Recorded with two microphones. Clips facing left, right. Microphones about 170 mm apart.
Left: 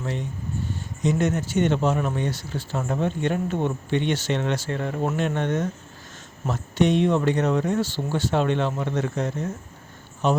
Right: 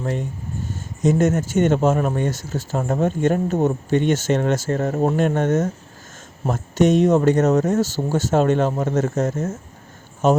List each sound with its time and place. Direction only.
0.0 s speech: 45° right (ahead or behind)